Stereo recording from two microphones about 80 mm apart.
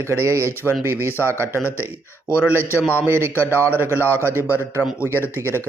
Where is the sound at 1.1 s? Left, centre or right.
Left.